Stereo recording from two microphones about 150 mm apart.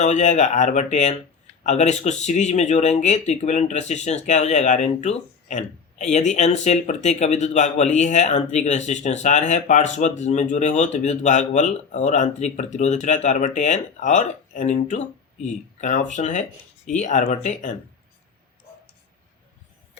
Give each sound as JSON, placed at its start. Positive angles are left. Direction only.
{"t": 0.0, "sound": "speech", "side_deg": 50}